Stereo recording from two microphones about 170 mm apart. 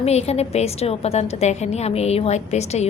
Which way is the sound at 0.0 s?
40° left (ahead or behind).